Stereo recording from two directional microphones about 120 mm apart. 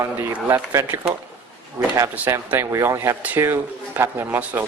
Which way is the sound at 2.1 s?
15° right (ahead or behind).